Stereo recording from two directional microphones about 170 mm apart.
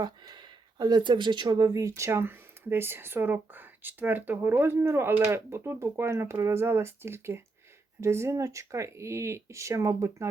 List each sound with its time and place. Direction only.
0.0 s speech: 25° right (ahead or behind)